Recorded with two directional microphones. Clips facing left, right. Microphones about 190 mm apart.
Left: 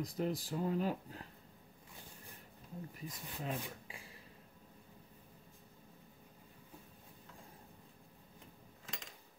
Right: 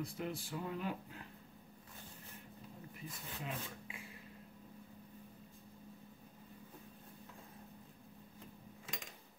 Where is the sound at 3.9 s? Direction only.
35° left (ahead or behind).